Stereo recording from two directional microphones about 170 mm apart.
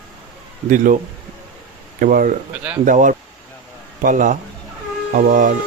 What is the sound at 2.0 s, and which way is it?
Speech, 55° right (ahead or behind).